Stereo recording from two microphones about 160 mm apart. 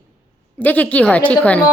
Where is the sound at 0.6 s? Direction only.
10° left (ahead or behind).